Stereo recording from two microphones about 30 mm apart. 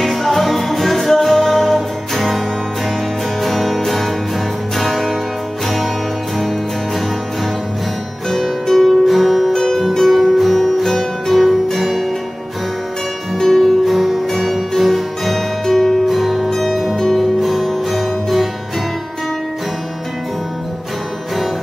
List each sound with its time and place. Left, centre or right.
0.1 s music: centre
3.4 s music: centre
8.3 s music: centre
8.8 s music: centre
9.5 s music: centre
10.0 s music: centre
13.6 s music: centre
14.8 s harpsichord: centre
15.7 s music: centre
16.4 s music: centre